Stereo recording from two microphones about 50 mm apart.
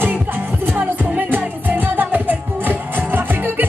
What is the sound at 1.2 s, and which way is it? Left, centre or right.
Music, right.